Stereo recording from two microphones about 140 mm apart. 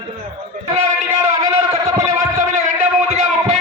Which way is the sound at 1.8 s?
20° right (ahead or behind).